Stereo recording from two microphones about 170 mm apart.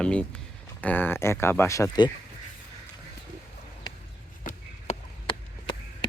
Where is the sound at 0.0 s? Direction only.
5° left (ahead or behind).